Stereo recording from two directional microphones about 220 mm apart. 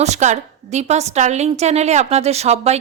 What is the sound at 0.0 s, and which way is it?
A woman's voice, 30° right (ahead or behind).